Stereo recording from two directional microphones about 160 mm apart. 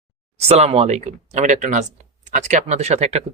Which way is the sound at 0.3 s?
40° right (ahead or behind).